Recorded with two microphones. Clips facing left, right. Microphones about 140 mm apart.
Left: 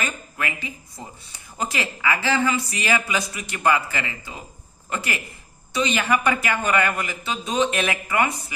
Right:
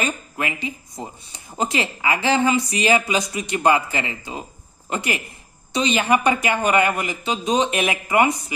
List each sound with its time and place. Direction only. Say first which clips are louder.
0.0 s speech: right 4 dB; 20° right (ahead or behind)